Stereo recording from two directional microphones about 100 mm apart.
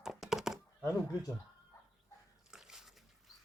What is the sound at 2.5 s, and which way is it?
Dog, 5° right (ahead or behind).